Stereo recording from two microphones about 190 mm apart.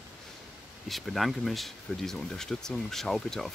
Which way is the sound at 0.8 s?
Centre (ahead or behind).